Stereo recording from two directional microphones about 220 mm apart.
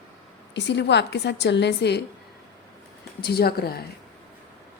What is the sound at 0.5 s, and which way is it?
Speech, 50° left (ahead or behind).